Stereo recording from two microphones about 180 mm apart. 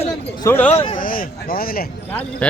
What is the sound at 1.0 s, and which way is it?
Speech, 50° left (ahead or behind).